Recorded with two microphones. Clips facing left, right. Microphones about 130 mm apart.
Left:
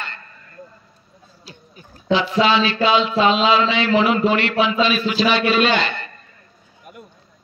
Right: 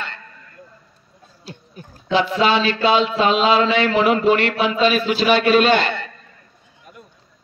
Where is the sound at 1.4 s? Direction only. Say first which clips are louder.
Right 6 dB; 50° right (ahead or behind).